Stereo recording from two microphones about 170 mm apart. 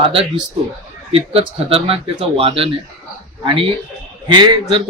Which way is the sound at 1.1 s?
35° right (ahead or behind).